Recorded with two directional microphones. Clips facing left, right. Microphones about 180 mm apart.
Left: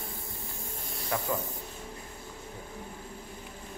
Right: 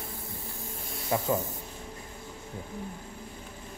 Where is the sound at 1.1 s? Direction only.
20° right (ahead or behind).